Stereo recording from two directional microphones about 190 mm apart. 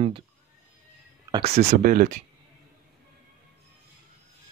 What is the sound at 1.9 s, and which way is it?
Speech, 50° right (ahead or behind).